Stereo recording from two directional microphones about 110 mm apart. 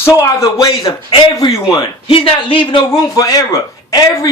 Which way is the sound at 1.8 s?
55° left (ahead or behind).